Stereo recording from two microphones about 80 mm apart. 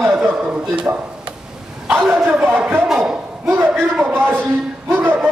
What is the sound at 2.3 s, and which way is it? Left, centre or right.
Speech, centre.